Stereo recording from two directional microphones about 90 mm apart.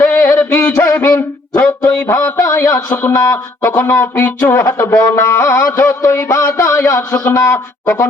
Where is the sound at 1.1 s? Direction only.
15° left (ahead or behind).